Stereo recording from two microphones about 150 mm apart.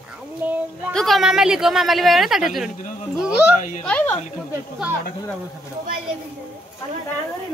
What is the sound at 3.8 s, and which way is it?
Speech, 10° left (ahead or behind).